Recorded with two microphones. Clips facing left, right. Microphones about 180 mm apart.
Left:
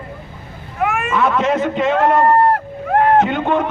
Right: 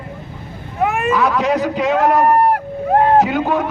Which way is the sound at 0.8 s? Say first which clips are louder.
Right 1 dB; 35° right (ahead or behind).